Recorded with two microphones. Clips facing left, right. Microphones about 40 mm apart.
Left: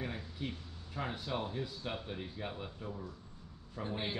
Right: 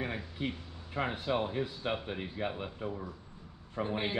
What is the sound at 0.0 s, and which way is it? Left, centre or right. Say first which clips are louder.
Speech: right 5 dB; right.